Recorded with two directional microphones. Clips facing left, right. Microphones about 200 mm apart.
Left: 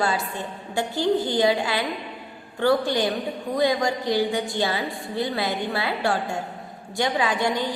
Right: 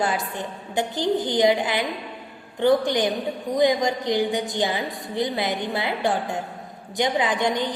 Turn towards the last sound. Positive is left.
turn(degrees=-20)  # may be behind; listen again after turning